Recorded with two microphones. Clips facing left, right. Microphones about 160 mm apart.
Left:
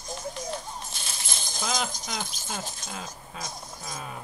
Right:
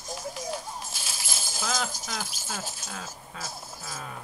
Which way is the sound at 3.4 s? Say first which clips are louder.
Even; 5° right (ahead or behind).